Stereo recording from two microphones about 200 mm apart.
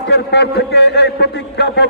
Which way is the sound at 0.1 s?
55° left (ahead or behind).